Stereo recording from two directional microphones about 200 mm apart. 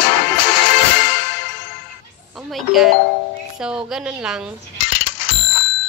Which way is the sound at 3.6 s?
5° right (ahead or behind).